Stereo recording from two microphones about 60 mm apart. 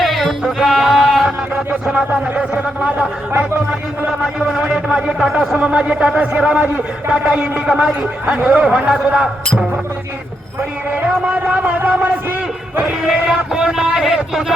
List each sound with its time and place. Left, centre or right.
0.0 s music: centre
1.5 s music: centre
2.3 s speech: right
4.5 s a man's voice: centre
11.0 s a man's voice: right
13.2 s music: centre